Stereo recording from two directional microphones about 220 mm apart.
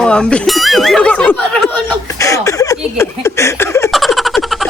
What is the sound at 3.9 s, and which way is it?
Snicker, centre (ahead or behind).